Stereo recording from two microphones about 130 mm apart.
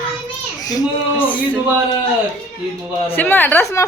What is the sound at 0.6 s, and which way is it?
Baby cry, 30° left (ahead or behind).